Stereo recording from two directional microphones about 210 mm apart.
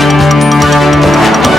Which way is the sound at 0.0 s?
Centre (ahead or behind).